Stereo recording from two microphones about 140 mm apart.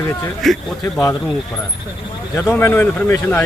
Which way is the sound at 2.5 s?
15° left (ahead or behind).